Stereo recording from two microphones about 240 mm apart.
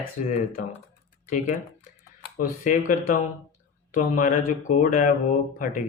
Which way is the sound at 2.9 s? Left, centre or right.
Left.